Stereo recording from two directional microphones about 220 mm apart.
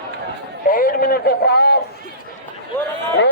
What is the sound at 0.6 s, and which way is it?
A man's voice, 40° left (ahead or behind).